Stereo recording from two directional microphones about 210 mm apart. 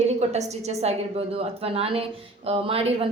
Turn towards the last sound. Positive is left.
turn(degrees=-25)  # may be behind; listen again after turning